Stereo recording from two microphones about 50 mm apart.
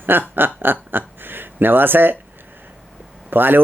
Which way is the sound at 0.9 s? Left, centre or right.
Right.